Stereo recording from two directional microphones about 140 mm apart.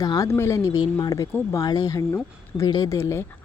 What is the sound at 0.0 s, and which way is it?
Speech, 25° left (ahead or behind).